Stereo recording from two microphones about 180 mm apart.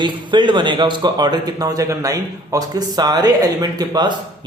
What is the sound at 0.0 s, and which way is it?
A man's voice, 25° right (ahead or behind).